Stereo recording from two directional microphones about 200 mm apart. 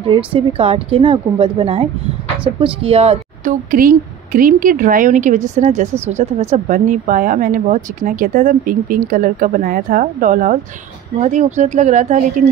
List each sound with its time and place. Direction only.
0.0 s speech: 25° right (ahead or behind)